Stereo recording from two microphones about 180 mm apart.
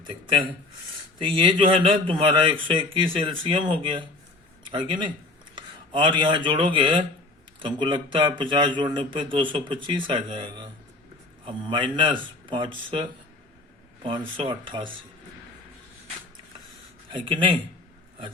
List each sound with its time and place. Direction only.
0.0 s a man's voice: 30° right (ahead or behind)
14.0 s a man's voice: 30° right (ahead or behind)
17.1 s a man's voice: 25° right (ahead or behind)